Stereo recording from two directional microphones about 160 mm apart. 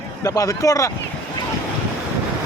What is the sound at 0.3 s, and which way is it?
Speech, 20° left (ahead or behind).